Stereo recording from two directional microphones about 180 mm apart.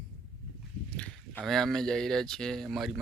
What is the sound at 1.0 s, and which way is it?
Rowboat, 5° left (ahead or behind).